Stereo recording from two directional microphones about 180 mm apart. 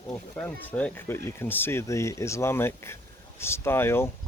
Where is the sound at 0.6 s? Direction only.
10° left (ahead or behind).